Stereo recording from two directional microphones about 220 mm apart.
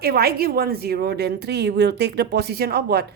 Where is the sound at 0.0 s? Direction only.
45° right (ahead or behind).